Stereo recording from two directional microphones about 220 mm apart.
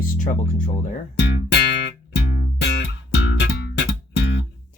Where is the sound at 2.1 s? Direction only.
50° left (ahead or behind).